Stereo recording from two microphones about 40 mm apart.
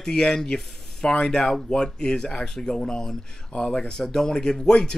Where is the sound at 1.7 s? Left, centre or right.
Centre.